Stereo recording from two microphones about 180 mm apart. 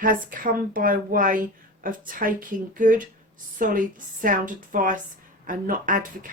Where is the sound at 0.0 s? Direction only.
50° right (ahead or behind).